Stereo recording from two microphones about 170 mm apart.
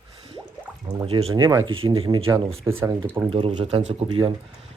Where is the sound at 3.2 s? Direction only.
30° right (ahead or behind).